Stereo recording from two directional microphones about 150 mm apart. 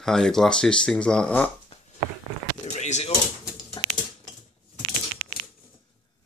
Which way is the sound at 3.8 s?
30° left (ahead or behind).